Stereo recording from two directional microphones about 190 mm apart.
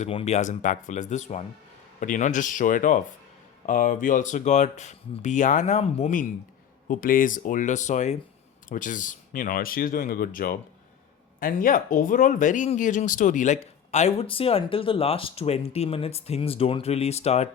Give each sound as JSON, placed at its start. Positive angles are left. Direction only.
{"t": 0.0, "sound": "speech", "side_deg": 35}